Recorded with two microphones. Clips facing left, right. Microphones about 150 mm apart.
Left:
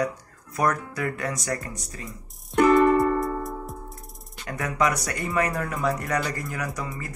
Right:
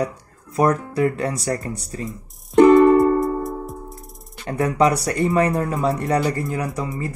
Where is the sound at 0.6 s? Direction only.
30° right (ahead or behind).